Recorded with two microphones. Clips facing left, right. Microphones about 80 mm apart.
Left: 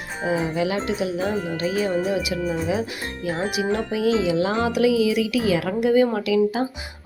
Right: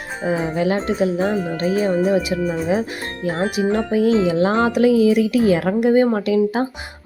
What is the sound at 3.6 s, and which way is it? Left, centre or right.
Speech, right.